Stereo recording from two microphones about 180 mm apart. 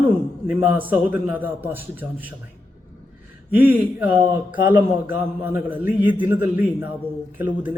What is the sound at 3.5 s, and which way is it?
A man's voice, 10° right (ahead or behind).